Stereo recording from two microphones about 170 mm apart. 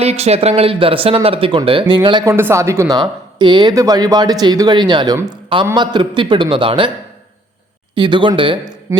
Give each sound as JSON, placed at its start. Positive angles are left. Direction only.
{"t": 0.0, "sound": "speech", "side_deg": -40}
{"t": 2.3, "sound": "speech", "side_deg": -15}
{"t": 7.9, "sound": "speech", "side_deg": -30}